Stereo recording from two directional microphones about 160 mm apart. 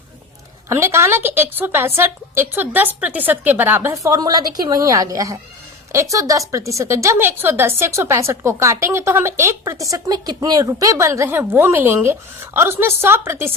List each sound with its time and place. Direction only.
0.7 s a woman's voice: 15° right (ahead or behind)